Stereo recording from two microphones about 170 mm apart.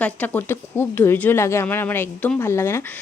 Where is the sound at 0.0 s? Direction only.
10° left (ahead or behind).